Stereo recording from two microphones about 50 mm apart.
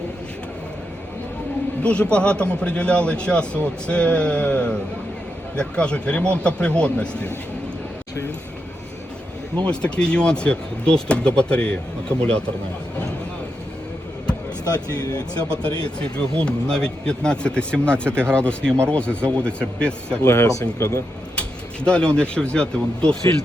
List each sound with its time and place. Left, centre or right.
1.8 s speech: left
9.6 s speech: centre
15.6 s speech: left
20.2 s speech: left
21.8 s speech: centre